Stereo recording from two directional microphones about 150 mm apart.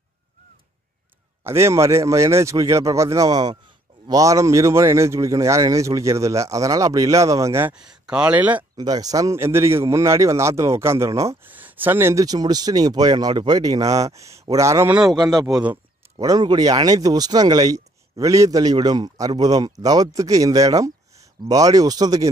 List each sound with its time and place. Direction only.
1.4 s speech: 15° right (ahead or behind)
7.9 s speech: 5° right (ahead or behind)
8.7 s speech: 25° right (ahead or behind)